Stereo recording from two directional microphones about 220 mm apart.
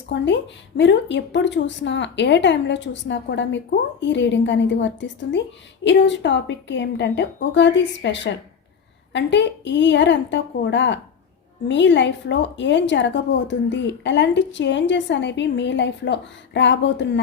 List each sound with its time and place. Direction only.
0.1 s a woman's voice: 55° left (ahead or behind)